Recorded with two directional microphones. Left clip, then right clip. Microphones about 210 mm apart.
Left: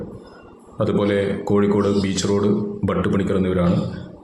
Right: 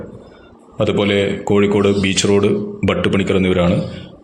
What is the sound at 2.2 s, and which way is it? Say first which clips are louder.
A man's voice: right 5 dB; 20° right (ahead or behind).